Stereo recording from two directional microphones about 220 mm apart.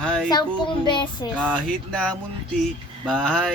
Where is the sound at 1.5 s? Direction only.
5° left (ahead or behind).